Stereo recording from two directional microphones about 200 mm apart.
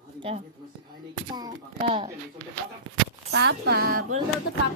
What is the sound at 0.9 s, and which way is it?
Speech, 20° right (ahead or behind).